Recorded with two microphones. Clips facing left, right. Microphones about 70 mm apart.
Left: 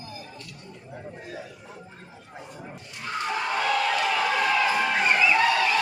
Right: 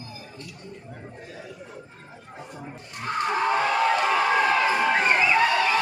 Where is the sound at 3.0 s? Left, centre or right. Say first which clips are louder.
Right 4 dB; right.